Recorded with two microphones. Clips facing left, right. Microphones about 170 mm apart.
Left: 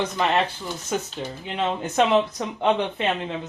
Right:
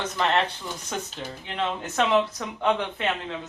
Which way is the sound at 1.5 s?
20° left (ahead or behind).